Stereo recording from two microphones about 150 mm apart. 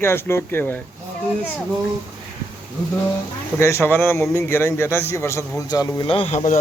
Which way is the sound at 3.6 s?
15° left (ahead or behind).